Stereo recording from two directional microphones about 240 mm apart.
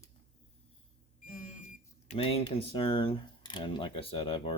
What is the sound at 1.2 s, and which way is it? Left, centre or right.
Smoke detector, left.